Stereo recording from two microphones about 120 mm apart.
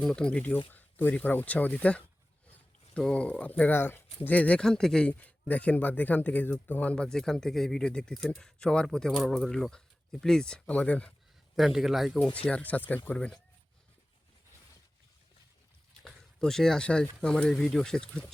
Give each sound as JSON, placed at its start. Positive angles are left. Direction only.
{"t": 0.0, "sound": "speech", "side_deg": 5}
{"t": 11.5, "sound": "speech", "side_deg": 0}
{"t": 12.5, "sound": "speech", "side_deg": 10}
{"t": 16.0, "sound": "speech", "side_deg": 5}